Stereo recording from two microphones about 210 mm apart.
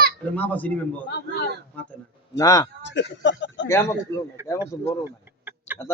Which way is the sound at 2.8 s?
55° left (ahead or behind).